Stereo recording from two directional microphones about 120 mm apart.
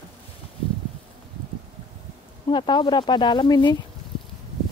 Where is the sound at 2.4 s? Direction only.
40° left (ahead or behind).